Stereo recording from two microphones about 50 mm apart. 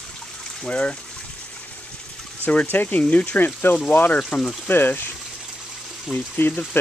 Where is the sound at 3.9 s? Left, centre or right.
Left.